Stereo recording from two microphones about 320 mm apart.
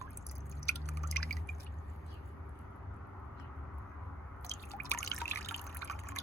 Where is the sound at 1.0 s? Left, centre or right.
Left.